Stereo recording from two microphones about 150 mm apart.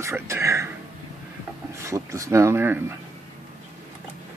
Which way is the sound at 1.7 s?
20° right (ahead or behind).